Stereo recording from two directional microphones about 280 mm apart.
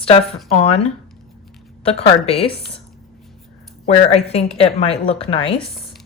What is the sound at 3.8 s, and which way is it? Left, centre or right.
A woman's voice, left.